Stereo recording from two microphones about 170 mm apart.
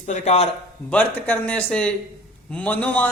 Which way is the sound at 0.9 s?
10° left (ahead or behind).